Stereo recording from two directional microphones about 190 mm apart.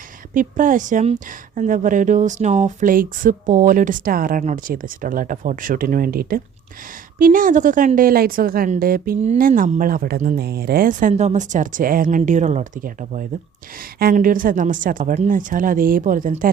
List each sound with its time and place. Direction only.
0.3 s a woman's voice: 45° right (ahead or behind)